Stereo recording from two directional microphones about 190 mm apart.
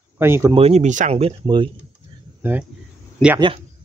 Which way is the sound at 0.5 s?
35° right (ahead or behind).